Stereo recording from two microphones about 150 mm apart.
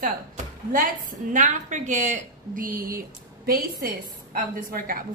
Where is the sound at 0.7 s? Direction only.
60° right (ahead or behind).